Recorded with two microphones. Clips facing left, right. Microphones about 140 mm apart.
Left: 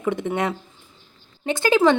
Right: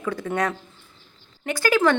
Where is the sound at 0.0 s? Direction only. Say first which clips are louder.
Left 2 dB; 25° left (ahead or behind).